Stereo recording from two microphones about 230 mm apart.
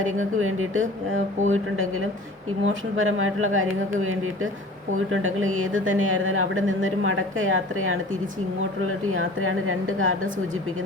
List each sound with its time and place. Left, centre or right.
0.0 s a woman's voice: right
9.0 s a woman's voice: right